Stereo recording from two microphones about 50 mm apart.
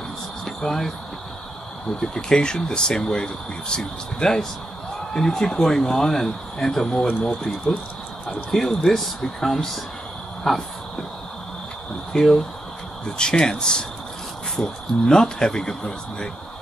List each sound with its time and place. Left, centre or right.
0.5 s speech: centre
2.0 s speech: centre
8.5 s speech: centre
12.1 s speech: centre